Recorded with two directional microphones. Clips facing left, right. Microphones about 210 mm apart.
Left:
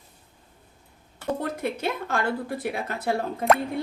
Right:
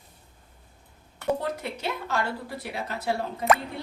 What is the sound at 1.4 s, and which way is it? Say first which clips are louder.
Speech: left 3 dB; 50° left (ahead or behind).